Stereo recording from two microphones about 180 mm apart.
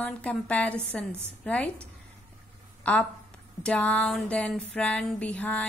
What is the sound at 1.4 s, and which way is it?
A woman's voice, 5° left (ahead or behind).